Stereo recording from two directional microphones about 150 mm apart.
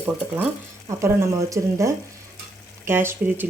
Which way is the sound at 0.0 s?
10° right (ahead or behind).